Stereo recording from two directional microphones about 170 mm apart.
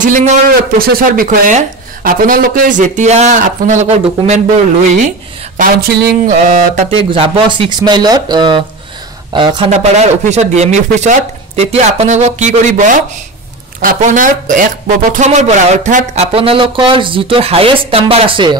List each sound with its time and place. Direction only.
0.0 s speech: 45° right (ahead or behind)
0.5 s speech: 60° right (ahead or behind); by 4.4 s 40° right (ahead or behind)
5.6 s speech: 65° right (ahead or behind)
7.0 s speech: 30° right (ahead or behind)
9.7 s speech: 40° right (ahead or behind)
16.3 s speech: 35° right (ahead or behind)